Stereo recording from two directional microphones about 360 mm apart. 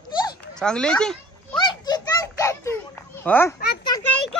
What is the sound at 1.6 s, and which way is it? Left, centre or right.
Children playing, centre.